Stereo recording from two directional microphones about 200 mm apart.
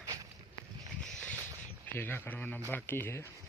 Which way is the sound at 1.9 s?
10° left (ahead or behind).